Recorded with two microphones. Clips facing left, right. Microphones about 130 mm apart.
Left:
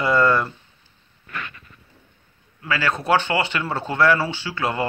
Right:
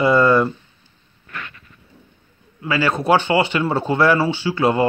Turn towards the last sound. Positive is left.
turn(degrees=-25)  # may be behind; listen again after turning